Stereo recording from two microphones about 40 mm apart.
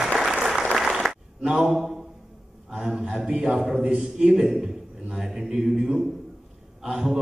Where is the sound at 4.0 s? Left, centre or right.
Centre.